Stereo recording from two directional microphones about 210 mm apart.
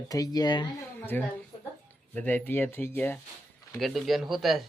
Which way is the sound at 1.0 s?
10° left (ahead or behind).